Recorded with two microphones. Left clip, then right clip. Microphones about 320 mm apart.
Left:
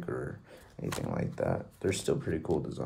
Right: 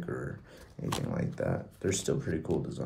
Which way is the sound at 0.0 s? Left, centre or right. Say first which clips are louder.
Left 1 dB; centre.